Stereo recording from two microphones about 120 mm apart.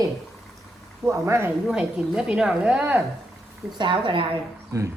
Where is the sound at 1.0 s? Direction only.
25° right (ahead or behind).